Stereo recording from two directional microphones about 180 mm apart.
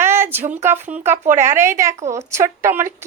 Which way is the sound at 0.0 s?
15° right (ahead or behind).